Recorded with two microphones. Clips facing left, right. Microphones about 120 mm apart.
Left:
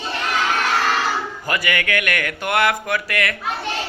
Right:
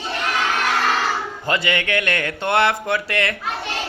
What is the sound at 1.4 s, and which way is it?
Speech, 25° right (ahead or behind).